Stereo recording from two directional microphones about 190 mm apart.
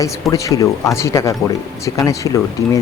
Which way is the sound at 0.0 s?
15° left (ahead or behind).